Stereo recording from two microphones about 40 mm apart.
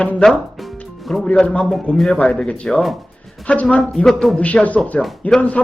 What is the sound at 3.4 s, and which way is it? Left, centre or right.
Speech, left.